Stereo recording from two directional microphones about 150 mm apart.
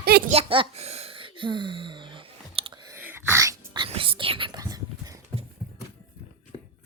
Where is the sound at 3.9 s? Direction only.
35° right (ahead or behind).